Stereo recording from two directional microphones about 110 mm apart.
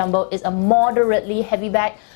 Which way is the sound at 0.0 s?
15° left (ahead or behind).